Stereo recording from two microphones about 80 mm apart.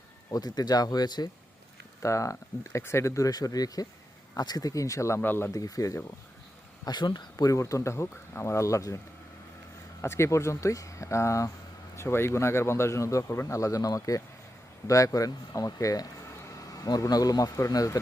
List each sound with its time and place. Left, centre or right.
0.3 s speech: left
2.0 s a man's voice: left
5.2 s speech: left
5.5 s speech: left
6.8 s a man's voice: left
10.0 s a man's voice: left